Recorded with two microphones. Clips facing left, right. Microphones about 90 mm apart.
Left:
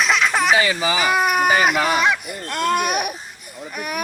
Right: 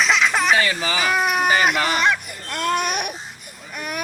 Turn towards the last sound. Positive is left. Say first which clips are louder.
# left 3 dB
turn(degrees=5)  # may be behind; listen again after turning